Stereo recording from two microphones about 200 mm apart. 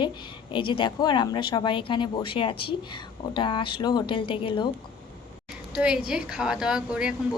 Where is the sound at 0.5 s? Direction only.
25° left (ahead or behind).